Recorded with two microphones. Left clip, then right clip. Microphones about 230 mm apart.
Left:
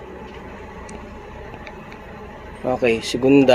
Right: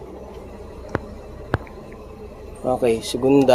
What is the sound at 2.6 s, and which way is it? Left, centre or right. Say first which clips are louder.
Speech: even; centre.